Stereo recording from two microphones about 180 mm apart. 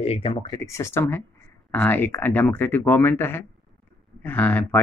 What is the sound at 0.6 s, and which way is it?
Speech, 15° left (ahead or behind).